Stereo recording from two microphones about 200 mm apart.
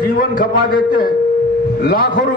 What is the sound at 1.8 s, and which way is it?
Speech, 50° left (ahead or behind).